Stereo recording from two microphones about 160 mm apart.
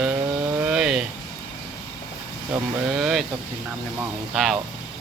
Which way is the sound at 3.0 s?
5° right (ahead or behind).